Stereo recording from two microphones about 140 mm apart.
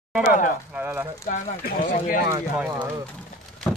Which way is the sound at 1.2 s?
90° left.